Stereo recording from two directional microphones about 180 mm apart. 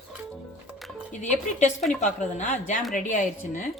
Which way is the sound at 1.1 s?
40° left (ahead or behind).